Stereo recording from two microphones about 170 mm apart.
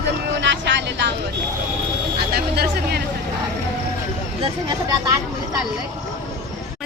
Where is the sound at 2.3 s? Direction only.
70° right (ahead or behind).